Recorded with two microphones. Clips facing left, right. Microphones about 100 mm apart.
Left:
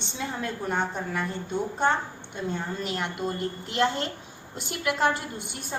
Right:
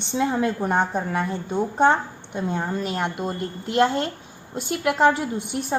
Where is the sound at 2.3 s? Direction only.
50° right (ahead or behind).